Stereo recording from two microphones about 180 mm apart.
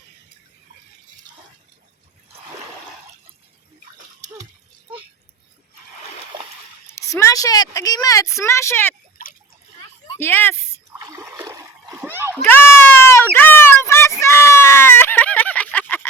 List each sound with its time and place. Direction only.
3.9 s splash: 40° right (ahead or behind)
6.8 s speech: 15° left (ahead or behind)
10.2 s speech: 10° left (ahead or behind)
10.9 s a sound: 15° right (ahead or behind)
11.9 s splash: 10° right (ahead or behind)
12.5 s a sound: 10° left (ahead or behind)